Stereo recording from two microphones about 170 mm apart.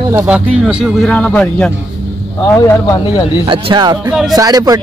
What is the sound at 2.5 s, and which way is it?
Speech, 20° left (ahead or behind).